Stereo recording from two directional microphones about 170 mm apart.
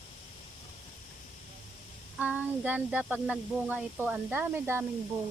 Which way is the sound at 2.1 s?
10° right (ahead or behind).